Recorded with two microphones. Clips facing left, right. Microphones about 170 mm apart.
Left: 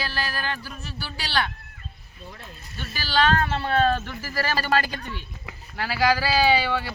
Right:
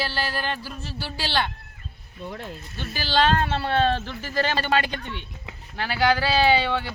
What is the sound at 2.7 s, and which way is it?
Speech, 25° right (ahead or behind).